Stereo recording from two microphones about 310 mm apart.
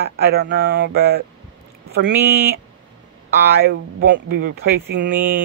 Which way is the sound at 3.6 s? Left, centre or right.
Right.